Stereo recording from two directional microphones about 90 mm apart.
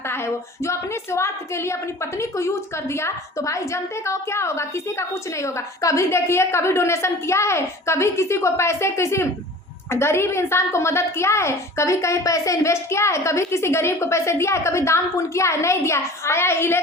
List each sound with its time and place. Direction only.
0.1 s a woman's voice: 30° left (ahead or behind)